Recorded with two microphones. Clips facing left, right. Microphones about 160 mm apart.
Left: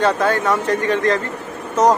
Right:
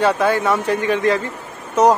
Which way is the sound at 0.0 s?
10° right (ahead or behind).